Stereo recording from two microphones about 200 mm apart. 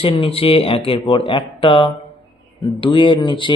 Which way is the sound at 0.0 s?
30° left (ahead or behind).